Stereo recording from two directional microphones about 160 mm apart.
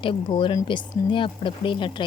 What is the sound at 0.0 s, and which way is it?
Speech, 30° left (ahead or behind).